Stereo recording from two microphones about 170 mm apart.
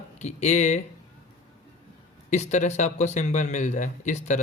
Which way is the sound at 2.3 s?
45° left (ahead or behind).